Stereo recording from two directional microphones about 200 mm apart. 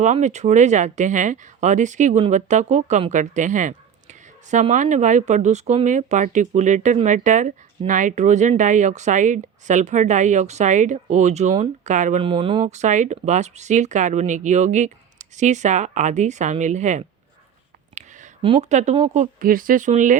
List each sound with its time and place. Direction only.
0.0 s speech: 35° right (ahead or behind)
12.3 s speech: 25° right (ahead or behind)
18.4 s speech: 30° right (ahead or behind)